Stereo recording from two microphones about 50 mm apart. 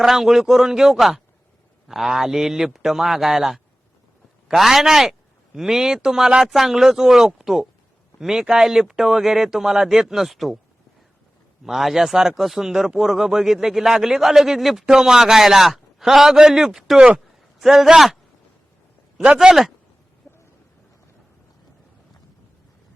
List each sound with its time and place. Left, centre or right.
0.0 s speech: centre
11.6 s speech: centre
20.2 s a sound: left